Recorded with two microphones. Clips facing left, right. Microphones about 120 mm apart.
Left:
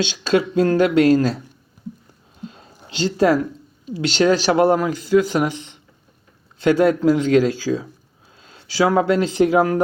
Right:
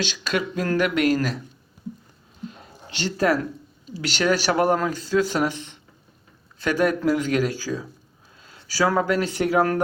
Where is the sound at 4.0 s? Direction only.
25° left (ahead or behind).